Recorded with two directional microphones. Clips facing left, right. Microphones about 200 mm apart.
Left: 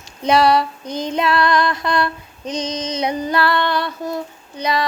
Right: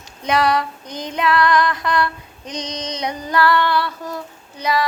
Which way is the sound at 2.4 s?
15° right (ahead or behind).